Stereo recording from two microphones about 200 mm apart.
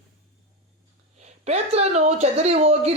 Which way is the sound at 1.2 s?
35° right (ahead or behind).